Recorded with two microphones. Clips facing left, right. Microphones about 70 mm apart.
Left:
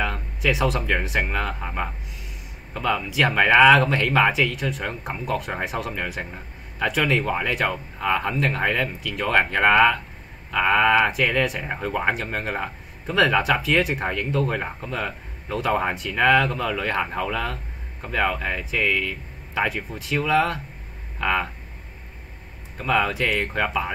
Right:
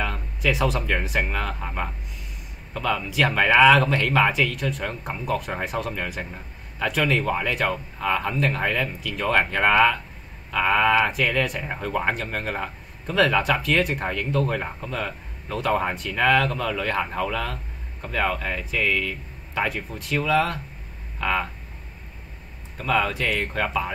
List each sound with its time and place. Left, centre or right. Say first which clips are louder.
0.0 s speech: left 1 dB; centre
22.8 s speech: left 1 dB; centre